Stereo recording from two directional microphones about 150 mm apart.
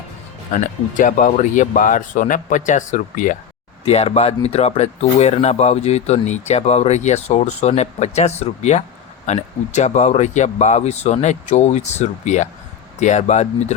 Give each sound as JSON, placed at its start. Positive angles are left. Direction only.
{"t": 0.5, "sound": "speech", "side_deg": 60}
{"t": 3.8, "sound": "speech", "side_deg": 45}